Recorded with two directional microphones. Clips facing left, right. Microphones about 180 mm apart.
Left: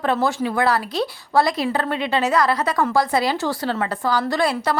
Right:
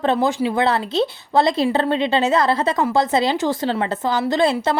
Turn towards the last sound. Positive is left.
turn(degrees=-20)  # may be behind; listen again after turning